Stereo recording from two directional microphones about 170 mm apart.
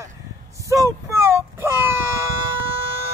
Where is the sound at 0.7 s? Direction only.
20° right (ahead or behind).